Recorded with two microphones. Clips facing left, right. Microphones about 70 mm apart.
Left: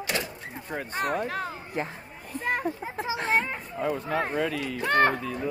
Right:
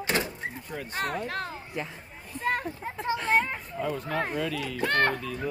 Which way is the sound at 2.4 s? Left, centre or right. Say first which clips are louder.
Even; centre.